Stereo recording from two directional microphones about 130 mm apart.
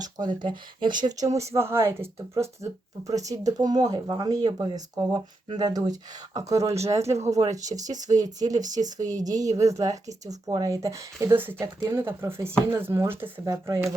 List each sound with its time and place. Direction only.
0.0 s speech: 35° right (ahead or behind)